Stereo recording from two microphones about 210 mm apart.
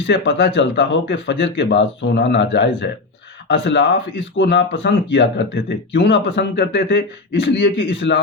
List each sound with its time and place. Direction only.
0.1 s speech: 55° left (ahead or behind)